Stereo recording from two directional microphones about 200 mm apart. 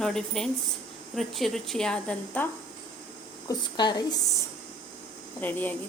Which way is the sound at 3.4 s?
20° left (ahead or behind).